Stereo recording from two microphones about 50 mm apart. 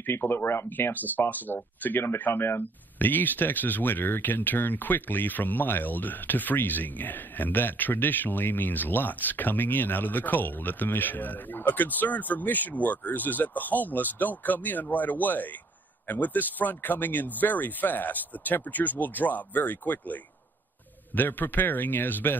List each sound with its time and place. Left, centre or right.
0.0 s speech: left